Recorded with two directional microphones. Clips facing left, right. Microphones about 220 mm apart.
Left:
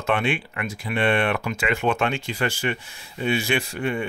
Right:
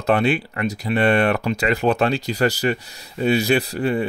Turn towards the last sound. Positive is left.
turn(degrees=-35)  # may be behind; listen again after turning